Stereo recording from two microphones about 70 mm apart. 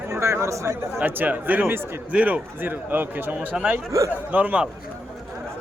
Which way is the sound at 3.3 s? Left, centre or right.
Centre.